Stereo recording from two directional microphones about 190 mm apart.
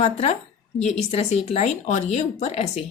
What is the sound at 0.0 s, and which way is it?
Speech, 35° left (ahead or behind).